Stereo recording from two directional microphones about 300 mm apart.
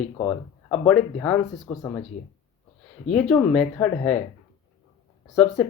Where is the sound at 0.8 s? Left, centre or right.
Centre.